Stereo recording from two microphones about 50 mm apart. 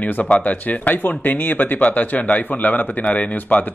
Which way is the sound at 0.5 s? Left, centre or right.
Left.